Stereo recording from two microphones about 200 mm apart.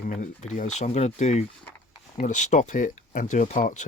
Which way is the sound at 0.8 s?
35° left (ahead or behind).